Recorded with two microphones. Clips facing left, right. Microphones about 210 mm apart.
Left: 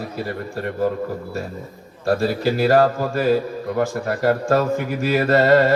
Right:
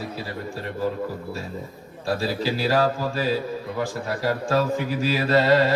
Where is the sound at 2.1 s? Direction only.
55° left (ahead or behind).